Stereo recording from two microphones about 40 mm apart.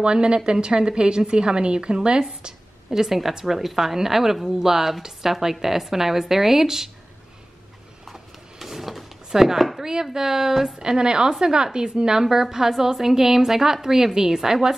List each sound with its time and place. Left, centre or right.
0.0 s a woman's voice: right
8.1 s a sound: centre
9.4 s a woman's voice: centre